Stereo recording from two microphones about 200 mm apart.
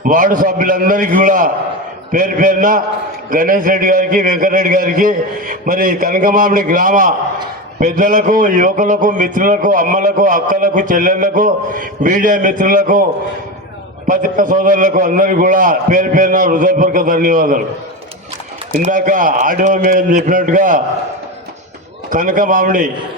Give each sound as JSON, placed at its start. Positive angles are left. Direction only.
{"t": 0.0, "sound": "a man's voice", "side_deg": -40}
{"t": 14.1, "sound": "a man's voice", "side_deg": -40}
{"t": 18.7, "sound": "a man's voice", "side_deg": -40}
{"t": 22.1, "sound": "a man's voice", "side_deg": -40}